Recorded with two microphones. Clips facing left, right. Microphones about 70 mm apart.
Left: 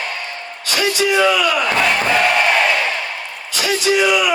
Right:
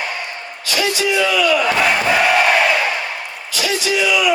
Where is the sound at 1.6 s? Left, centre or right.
Centre.